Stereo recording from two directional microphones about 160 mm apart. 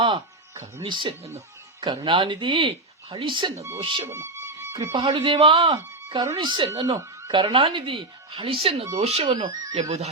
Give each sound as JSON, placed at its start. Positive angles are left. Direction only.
{"t": 0.8, "sound": "speech", "side_deg": -30}
{"t": 4.0, "sound": "music", "side_deg": -20}
{"t": 4.9, "sound": "speech", "side_deg": -30}
{"t": 6.1, "sound": "speech", "side_deg": -20}
{"t": 9.3, "sound": "speech", "side_deg": -25}